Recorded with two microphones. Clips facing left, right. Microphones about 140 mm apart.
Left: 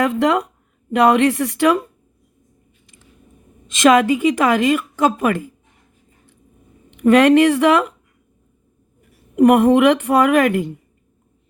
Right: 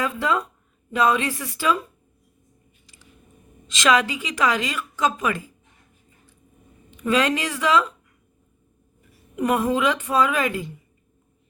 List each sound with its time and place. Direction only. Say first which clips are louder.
0.0 s speech: left 7 dB; 70° left (ahead or behind)
3.7 s a woman's voice: left 7 dB; 50° left (ahead or behind)
6.9 s a woman's voice: left 10 dB; 60° left (ahead or behind)
9.3 s a woman's voice: left 10 dB; 60° left (ahead or behind)